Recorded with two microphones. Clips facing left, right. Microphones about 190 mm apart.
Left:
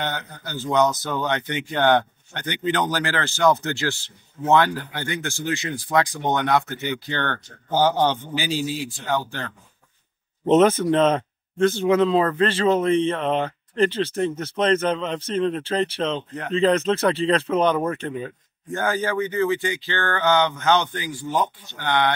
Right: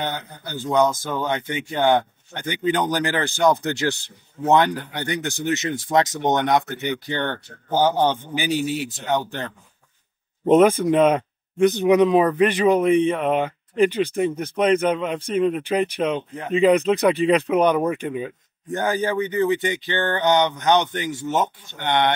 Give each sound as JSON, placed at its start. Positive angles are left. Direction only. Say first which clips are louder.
{"t": 0.9, "sound": "speech", "louder": "even", "side_deg": -10}